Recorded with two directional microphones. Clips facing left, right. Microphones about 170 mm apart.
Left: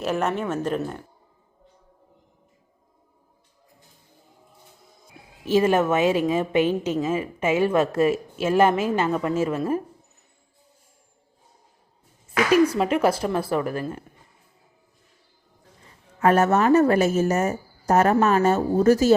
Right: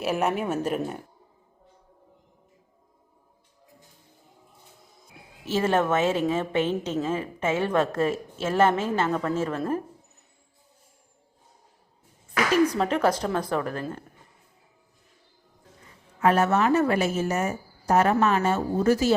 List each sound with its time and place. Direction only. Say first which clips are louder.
0.0 s speech: left 1 dB; 5° right (ahead or behind)
5.5 s a woman's voice: left 4 dB; 15° left (ahead or behind)
12.6 s a woman's voice: left 2 dB; 10° left (ahead or behind)
16.2 s a woman's voice: left 3 dB; 45° left (ahead or behind)